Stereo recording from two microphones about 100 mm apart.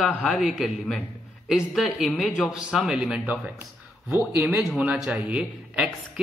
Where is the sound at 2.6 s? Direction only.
10° right (ahead or behind).